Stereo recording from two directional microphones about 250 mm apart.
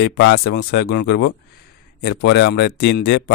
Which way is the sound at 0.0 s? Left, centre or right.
Left.